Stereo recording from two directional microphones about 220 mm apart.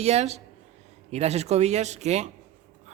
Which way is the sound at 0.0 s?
30° right (ahead or behind).